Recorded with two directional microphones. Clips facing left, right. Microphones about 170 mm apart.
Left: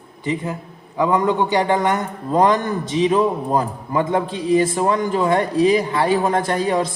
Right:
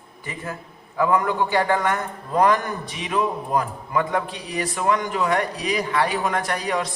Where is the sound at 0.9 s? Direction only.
20° left (ahead or behind).